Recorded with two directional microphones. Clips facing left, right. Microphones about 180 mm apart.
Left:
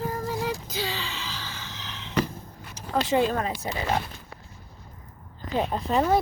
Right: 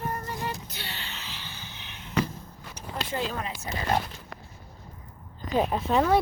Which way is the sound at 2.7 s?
90° left.